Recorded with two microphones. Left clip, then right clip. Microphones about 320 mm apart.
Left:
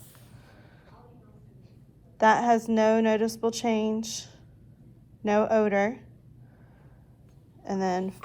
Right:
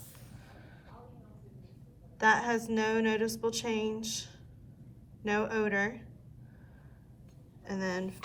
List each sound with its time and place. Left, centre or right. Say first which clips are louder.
2.1 s a woman's voice: left 6 dB; centre
7.6 s a woman's voice: left 7 dB; centre